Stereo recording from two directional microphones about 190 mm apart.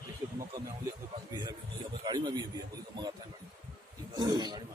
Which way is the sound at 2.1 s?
20° right (ahead or behind).